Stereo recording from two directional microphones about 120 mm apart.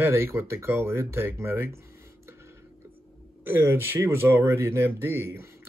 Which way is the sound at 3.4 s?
20° right (ahead or behind).